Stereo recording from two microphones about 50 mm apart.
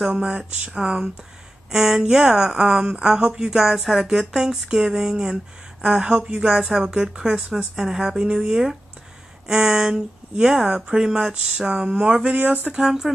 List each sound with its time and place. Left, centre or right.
0.0 s speech: right
12.8 s speech: centre